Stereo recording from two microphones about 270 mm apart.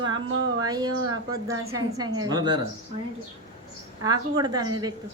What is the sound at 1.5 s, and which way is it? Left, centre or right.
Speech, right.